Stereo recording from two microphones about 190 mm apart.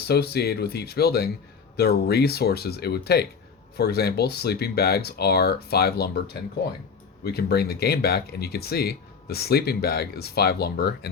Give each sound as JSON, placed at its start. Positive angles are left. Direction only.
{"t": 0.0, "sound": "speech", "side_deg": 55}